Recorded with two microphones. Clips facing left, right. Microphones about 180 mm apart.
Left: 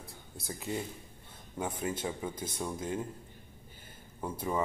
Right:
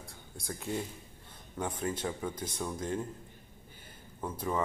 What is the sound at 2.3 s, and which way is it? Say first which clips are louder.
Speech: even; 25° left (ahead or behind).